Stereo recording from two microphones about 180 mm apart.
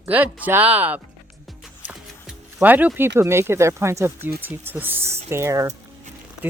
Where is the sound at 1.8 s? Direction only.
10° right (ahead or behind).